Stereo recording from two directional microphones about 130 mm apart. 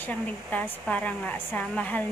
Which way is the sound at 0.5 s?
10° left (ahead or behind).